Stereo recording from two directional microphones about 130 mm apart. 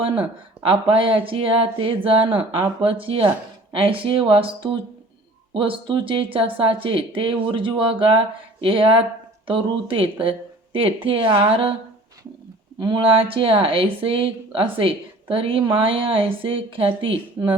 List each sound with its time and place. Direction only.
0.0 s speech: 40° right (ahead or behind)
12.8 s speech: 40° right (ahead or behind)